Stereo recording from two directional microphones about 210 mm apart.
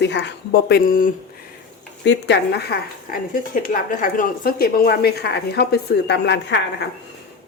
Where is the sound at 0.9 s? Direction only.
40° left (ahead or behind).